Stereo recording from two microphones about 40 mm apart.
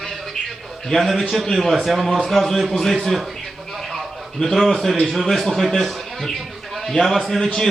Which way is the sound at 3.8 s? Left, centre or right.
Centre.